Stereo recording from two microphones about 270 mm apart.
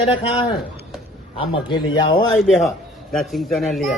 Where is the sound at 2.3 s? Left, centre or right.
Centre.